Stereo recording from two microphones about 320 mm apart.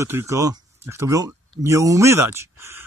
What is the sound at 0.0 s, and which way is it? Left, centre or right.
Speech, centre.